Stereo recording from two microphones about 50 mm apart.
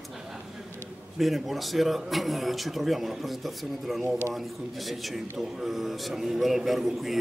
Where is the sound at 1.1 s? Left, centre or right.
Centre.